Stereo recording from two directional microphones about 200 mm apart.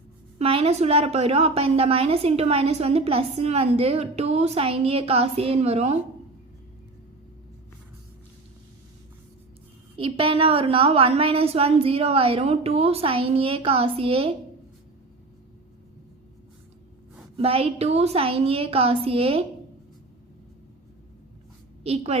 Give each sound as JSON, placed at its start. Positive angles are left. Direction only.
{"t": 0.3, "sound": "a woman's voice", "side_deg": -30}
{"t": 10.0, "sound": "a woman's voice", "side_deg": -25}
{"t": 17.3, "sound": "a woman's voice", "side_deg": -30}
{"t": 21.8, "sound": "a woman's voice", "side_deg": -30}